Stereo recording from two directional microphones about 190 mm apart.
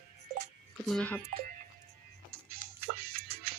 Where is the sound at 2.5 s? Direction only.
55° right (ahead or behind).